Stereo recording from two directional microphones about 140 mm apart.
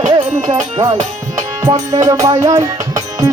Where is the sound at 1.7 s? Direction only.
25° right (ahead or behind).